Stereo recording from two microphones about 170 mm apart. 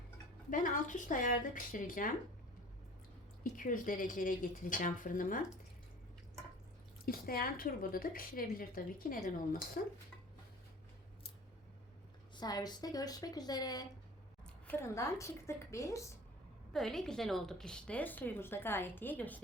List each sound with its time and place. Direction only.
0.5 s speech: 50° left (ahead or behind)
3.6 s speech: 55° left (ahead or behind)
7.0 s a woman's voice: 60° left (ahead or behind)
12.4 s a woman's voice: 25° left (ahead or behind)
16.7 s a woman's voice: centre (ahead or behind)